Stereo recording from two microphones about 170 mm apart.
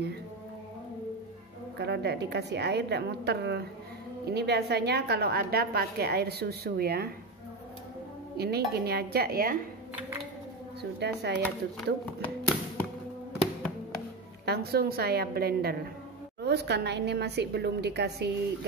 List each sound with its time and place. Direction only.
1.8 s a woman's voice: 80° right
8.4 s speech: 70° right (ahead or behind)
10.8 s speech: 80° right
14.4 s a woman's voice: 70° right (ahead or behind)
16.4 s a woman's voice: 80° right